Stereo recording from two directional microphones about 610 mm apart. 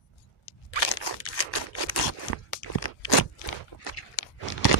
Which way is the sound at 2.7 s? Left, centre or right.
Left.